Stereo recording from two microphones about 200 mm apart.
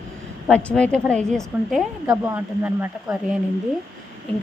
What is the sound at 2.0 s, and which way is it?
Speech, 15° right (ahead or behind).